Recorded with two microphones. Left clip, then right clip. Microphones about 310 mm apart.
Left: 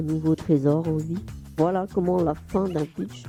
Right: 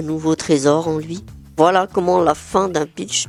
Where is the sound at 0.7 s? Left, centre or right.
Right.